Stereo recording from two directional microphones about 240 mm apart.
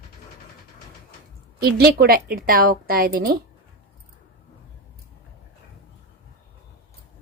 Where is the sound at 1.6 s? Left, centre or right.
Right.